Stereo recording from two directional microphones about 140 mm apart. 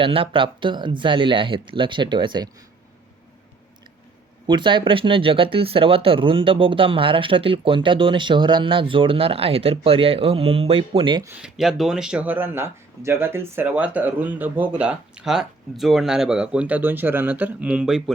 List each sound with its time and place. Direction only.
0.0 s speech: 40° right (ahead or behind)
4.4 s speech: 35° right (ahead or behind)
11.4 s speech: 5° right (ahead or behind)